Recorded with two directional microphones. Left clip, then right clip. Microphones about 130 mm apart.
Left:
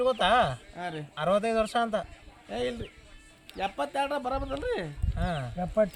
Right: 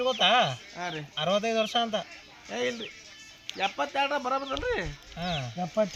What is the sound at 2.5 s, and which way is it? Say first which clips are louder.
Speech: right 1 dB; 35° left (ahead or behind).